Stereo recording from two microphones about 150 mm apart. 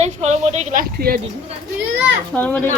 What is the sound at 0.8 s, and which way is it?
Speech, 85° right.